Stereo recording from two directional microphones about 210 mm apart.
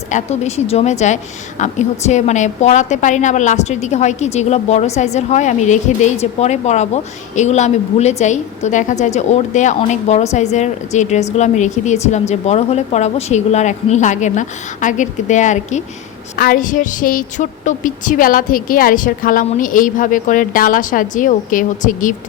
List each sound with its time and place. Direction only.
0.1 s a woman's voice: 30° left (ahead or behind)